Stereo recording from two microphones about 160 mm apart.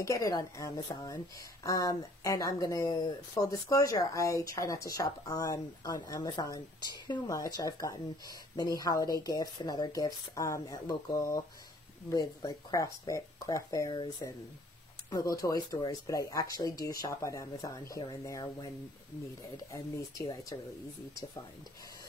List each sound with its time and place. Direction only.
0.0 s a woman's voice: 20° left (ahead or behind)